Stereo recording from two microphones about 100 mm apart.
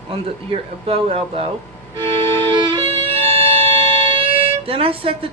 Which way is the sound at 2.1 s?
55° right (ahead or behind).